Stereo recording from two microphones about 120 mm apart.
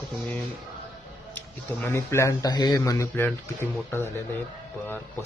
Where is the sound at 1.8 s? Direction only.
20° left (ahead or behind).